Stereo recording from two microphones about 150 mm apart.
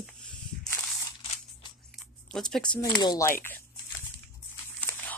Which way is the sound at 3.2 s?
15° left (ahead or behind).